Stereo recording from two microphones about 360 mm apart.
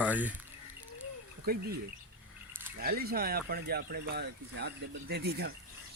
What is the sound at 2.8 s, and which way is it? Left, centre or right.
Speech, right.